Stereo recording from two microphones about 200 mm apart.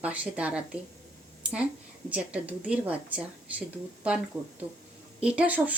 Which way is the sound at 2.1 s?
5° right (ahead or behind).